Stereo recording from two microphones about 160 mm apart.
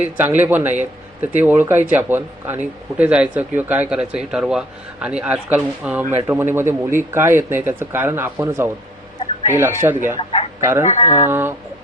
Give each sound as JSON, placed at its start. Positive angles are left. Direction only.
{"t": 0.0, "sound": "a man's voice", "side_deg": -10}
{"t": 10.2, "sound": "speech", "side_deg": 35}
{"t": 10.6, "sound": "speech", "side_deg": -15}
{"t": 10.8, "sound": "speech", "side_deg": 40}
{"t": 11.3, "sound": "a man's voice", "side_deg": -15}